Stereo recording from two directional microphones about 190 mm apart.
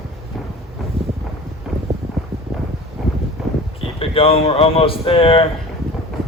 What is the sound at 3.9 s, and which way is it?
Speech, 30° left (ahead or behind).